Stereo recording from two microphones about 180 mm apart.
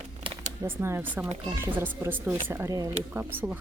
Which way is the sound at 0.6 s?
15° right (ahead or behind).